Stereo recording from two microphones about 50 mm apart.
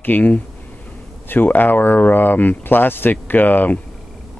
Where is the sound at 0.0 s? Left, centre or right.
Left.